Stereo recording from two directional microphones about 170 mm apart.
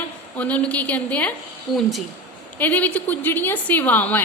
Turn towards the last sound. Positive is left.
turn(degrees=10)  # may be behind; listen again after turning